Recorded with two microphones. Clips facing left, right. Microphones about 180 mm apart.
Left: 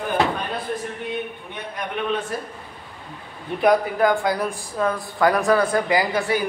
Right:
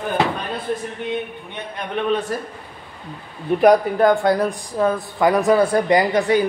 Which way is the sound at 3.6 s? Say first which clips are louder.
Right 4 dB; 40° right (ahead or behind).